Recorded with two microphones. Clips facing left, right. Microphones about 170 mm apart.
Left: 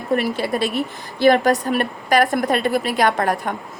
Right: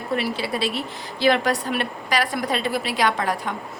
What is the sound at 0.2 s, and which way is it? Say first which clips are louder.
Speech: left 4 dB; 50° left (ahead or behind).